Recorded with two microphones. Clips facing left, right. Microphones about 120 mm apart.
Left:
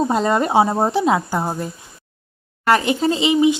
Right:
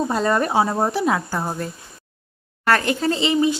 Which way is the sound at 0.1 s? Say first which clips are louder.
Left 3 dB; 20° left (ahead or behind).